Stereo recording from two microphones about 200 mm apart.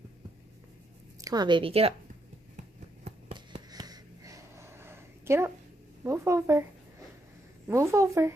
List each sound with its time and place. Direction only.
1.2 s speech: 20° right (ahead or behind)
2.5 s a sound: 30° right (ahead or behind); by 5.5 s 15° right (ahead or behind)
6.0 s a woman's voice: 15° right (ahead or behind)
7.6 s a woman's voice: 15° right (ahead or behind)